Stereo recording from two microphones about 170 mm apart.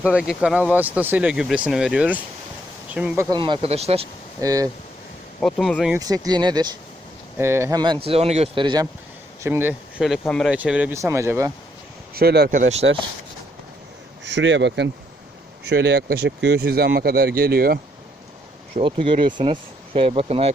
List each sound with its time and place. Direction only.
0.1 s speech: 5° right (ahead or behind)
3.2 s speech: 25° right (ahead or behind)
4.4 s speech: 20° right (ahead or behind)
5.4 s speech: centre (ahead or behind)
5.9 s speech: 20° right (ahead or behind)
7.3 s speech: 15° right (ahead or behind)
9.4 s speech: 10° right (ahead or behind)
10.0 s speech: centre (ahead or behind); by 11.5 s 15° right (ahead or behind)
12.1 s speech: 70° right (ahead or behind)
12.5 s speech: 50° right (ahead or behind)
14.3 s speech: 90° right; by 17.7 s 65° right (ahead or behind)
18.8 s speech: 30° right (ahead or behind)